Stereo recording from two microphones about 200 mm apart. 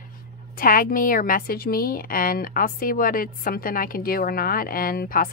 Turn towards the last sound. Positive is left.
turn(degrees=45)  # may be behind; listen again after turning